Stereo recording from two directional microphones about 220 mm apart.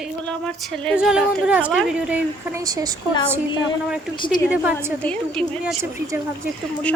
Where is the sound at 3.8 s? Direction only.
5° right (ahead or behind).